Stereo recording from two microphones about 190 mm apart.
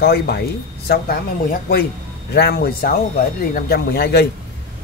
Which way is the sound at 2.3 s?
60° left (ahead or behind).